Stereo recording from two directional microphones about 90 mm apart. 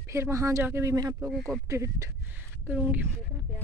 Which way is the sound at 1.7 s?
35° right (ahead or behind).